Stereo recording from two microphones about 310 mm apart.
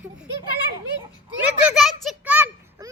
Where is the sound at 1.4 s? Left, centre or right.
Centre.